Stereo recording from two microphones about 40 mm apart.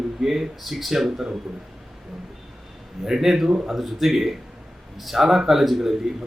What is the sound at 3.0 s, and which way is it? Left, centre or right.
Speech, centre.